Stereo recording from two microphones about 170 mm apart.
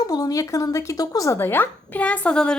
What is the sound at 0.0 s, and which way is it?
Speech, 20° left (ahead or behind).